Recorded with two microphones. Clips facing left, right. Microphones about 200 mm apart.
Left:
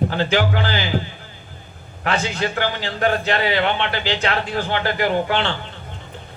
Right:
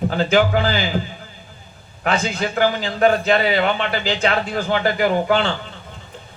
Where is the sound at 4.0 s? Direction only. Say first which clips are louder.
Right 2 dB; 40° left (ahead or behind).